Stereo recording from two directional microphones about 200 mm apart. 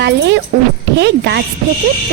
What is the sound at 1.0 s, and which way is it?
Speech, 55° right (ahead or behind).